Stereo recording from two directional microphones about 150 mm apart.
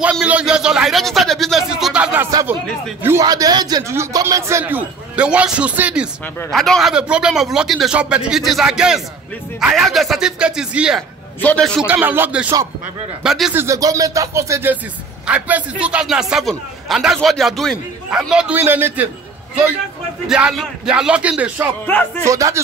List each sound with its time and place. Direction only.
0.0 s a man's voice: 10° right (ahead or behind)
2.3 s music: 25° right (ahead or behind)
3.0 s a man's voice: 20° right (ahead or behind)
11.4 s a man's voice: 5° left (ahead or behind)
11.9 s a man's voice: 15° right (ahead or behind)
13.6 s music: 20° right (ahead or behind)
15.2 s a man's voice: 10° right (ahead or behind)
20.2 s a man's voice: 5° right (ahead or behind)
22.2 s music: 20° right (ahead or behind)